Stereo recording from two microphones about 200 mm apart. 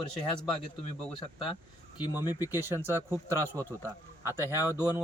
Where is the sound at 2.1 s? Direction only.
10° right (ahead or behind).